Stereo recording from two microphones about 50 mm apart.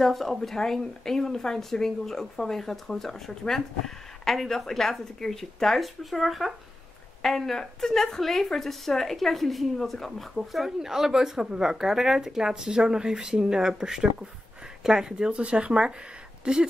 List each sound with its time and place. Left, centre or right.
0.0 s a woman's voice: centre